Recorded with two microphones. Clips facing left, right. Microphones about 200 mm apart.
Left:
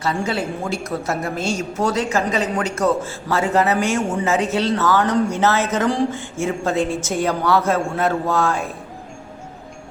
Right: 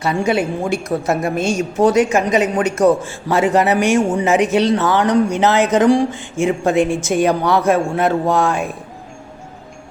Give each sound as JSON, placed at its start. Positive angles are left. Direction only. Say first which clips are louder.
{"t": 0.0, "sound": "a woman's voice", "louder": "right 5 dB", "side_deg": -15}